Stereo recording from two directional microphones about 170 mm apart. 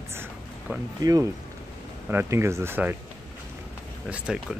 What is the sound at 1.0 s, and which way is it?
Speech, 20° right (ahead or behind).